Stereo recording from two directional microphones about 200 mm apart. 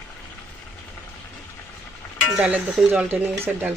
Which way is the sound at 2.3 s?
5° right (ahead or behind).